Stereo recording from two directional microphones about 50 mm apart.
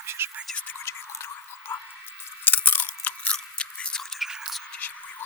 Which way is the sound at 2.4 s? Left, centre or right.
Left.